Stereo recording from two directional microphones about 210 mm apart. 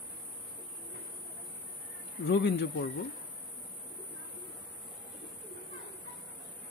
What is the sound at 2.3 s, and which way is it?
Speech, 55° left (ahead or behind).